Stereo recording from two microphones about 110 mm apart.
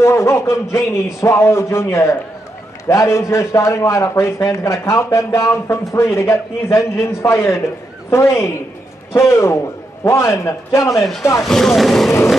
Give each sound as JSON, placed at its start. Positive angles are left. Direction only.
{"t": 0.0, "sound": "a man's voice", "side_deg": 25}
{"t": 11.4, "sound": "speech", "side_deg": 5}